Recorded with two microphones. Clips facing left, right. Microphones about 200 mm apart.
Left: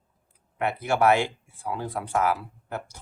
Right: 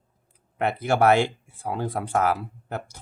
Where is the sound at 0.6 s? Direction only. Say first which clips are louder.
Right 2 dB; 30° right (ahead or behind).